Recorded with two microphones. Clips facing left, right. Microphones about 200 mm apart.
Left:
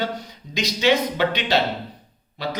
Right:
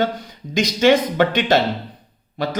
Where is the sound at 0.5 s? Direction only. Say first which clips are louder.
Right 5 dB; 50° right (ahead or behind).